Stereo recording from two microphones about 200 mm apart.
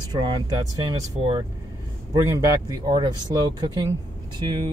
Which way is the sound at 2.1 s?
15° right (ahead or behind).